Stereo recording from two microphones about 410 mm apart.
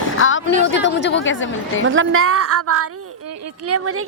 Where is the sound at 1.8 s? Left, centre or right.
Right.